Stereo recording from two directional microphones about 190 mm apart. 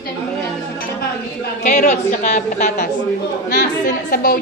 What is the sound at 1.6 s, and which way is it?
A woman's voice, 40° left (ahead or behind).